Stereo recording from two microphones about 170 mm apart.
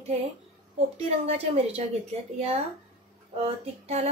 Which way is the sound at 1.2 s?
35° right (ahead or behind).